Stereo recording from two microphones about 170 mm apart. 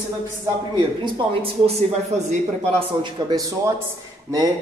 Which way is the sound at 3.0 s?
25° right (ahead or behind).